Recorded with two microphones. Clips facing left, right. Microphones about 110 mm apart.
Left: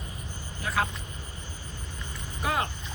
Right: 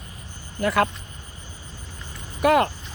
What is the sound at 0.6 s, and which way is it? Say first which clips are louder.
Speech: right 8 dB; 80° right.